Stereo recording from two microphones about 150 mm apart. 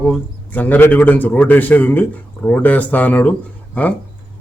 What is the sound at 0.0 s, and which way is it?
A man's voice, 10° left (ahead or behind).